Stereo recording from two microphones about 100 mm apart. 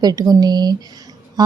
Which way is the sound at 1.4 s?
40° right (ahead or behind).